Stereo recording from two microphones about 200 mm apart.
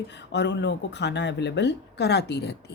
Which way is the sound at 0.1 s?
60° left (ahead or behind).